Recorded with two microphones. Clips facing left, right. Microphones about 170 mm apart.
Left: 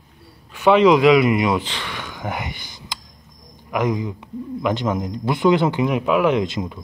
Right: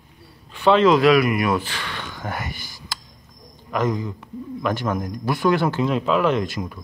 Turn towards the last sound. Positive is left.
turn(degrees=20)  # may be behind; listen again after turning